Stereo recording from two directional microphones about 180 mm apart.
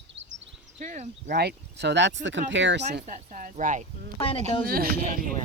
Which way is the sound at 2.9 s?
50° right (ahead or behind).